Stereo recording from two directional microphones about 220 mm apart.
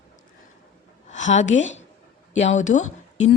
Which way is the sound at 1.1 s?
35° left (ahead or behind).